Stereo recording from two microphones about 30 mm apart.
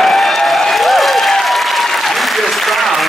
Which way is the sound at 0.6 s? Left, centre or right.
Centre.